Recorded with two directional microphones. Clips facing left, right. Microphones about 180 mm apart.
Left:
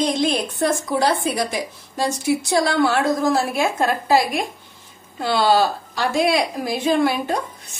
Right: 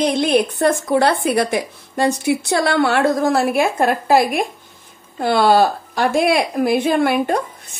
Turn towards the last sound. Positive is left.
turn(degrees=-60)  # may be behind; listen again after turning